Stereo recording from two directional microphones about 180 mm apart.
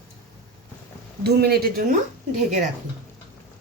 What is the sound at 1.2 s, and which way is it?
Speech, 60° right (ahead or behind).